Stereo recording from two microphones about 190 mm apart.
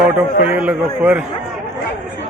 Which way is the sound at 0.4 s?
5° right (ahead or behind).